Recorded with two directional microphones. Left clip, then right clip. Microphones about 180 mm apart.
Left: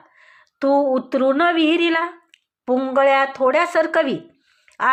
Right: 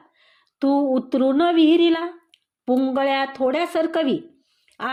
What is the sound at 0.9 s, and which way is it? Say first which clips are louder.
Speech: left 2 dB; 35° right (ahead or behind).